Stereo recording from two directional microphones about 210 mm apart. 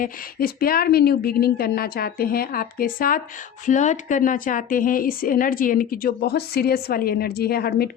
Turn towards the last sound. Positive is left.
turn(degrees=45)  # may be behind; listen again after turning